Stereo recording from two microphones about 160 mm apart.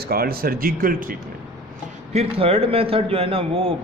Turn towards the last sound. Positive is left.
turn(degrees=-35)  # may be behind; listen again after turning